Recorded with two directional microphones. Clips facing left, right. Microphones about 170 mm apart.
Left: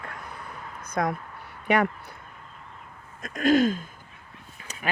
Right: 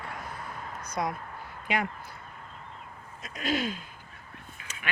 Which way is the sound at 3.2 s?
45° left (ahead or behind).